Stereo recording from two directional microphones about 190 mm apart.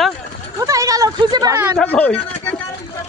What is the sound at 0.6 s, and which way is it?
Speech, 20° right (ahead or behind).